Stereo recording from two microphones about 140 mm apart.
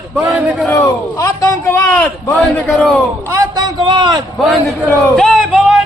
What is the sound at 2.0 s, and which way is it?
Speech, 10° left (ahead or behind).